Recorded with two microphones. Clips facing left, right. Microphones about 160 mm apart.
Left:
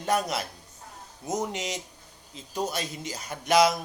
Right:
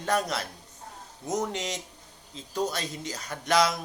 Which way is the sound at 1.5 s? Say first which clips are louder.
Even; 15° left (ahead or behind).